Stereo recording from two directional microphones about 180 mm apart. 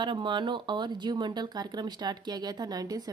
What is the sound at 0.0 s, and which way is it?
Speech, 25° right (ahead or behind).